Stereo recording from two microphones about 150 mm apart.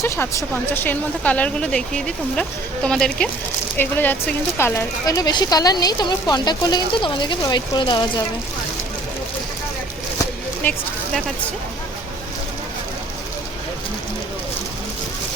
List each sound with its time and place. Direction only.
0.0 s speech: 15° left (ahead or behind); by 8.2 s 30° left (ahead or behind)
10.6 s speech: 10° left (ahead or behind)